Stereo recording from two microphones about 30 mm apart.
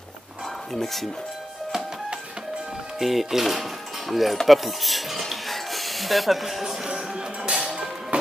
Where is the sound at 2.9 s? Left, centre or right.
Centre; by 7.3 s right.